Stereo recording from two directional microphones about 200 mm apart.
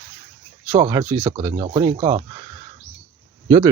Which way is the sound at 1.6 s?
30° right (ahead or behind).